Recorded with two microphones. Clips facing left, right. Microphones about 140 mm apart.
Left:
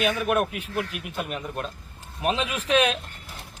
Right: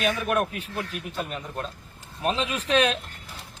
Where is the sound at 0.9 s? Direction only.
35° right (ahead or behind).